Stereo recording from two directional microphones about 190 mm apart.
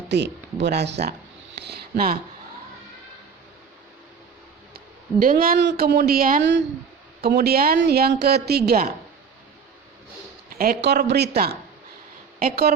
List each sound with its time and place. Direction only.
0.1 s speech: 65° right (ahead or behind)
5.2 s speech: 50° right (ahead or behind)
10.5 s speech: 50° right (ahead or behind)